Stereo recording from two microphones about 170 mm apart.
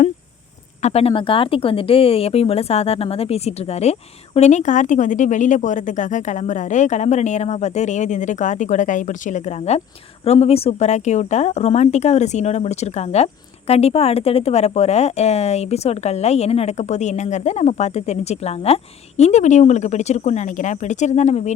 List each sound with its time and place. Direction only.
0.8 s speech: 40° left (ahead or behind)